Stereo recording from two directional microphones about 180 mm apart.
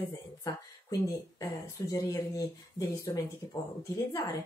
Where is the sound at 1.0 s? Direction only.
15° left (ahead or behind).